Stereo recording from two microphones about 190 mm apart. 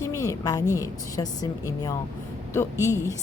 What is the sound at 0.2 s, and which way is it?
A woman's voice, 20° left (ahead or behind).